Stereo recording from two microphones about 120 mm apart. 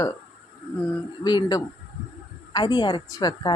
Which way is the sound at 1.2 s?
35° left (ahead or behind).